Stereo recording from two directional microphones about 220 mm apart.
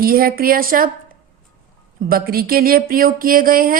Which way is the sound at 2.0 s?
40° right (ahead or behind).